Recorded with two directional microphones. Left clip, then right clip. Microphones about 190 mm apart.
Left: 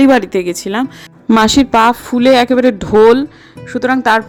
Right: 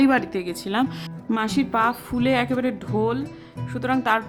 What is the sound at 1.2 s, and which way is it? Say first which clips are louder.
A woman's voice: left 14 dB; 40° left (ahead or behind).